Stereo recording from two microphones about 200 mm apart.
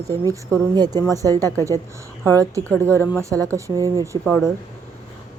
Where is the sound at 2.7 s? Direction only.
5° left (ahead or behind).